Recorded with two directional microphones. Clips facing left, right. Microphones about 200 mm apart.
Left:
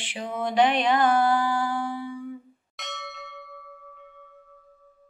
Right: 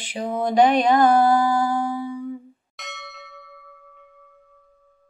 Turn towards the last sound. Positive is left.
turn(degrees=0)  # may be behind; listen again after turning